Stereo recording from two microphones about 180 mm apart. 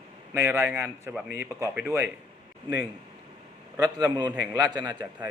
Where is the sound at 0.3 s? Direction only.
15° right (ahead or behind).